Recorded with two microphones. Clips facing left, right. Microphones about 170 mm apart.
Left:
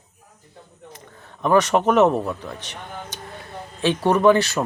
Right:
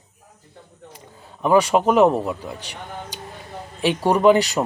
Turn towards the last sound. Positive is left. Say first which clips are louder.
# right 1 dB
turn(degrees=-15)  # may be behind; listen again after turning